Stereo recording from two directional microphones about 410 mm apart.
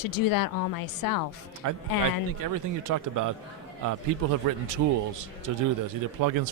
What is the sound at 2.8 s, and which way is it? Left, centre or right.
A man's voice, right.